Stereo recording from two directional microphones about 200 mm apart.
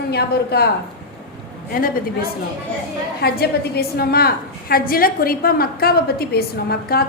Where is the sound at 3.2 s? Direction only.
50° left (ahead or behind).